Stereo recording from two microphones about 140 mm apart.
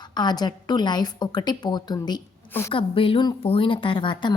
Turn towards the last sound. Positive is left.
turn(degrees=35)  # may be behind; listen again after turning